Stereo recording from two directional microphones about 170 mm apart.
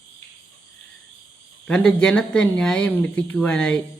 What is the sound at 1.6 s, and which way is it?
Speech, 5° left (ahead or behind).